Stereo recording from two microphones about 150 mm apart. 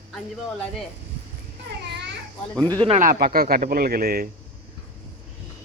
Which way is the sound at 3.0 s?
80° right.